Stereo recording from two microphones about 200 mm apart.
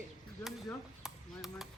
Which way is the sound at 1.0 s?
Centre (ahead or behind).